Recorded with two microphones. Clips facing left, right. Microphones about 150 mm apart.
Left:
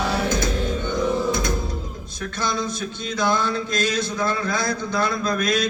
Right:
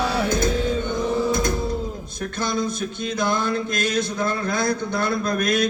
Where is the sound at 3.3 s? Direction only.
50° right (ahead or behind).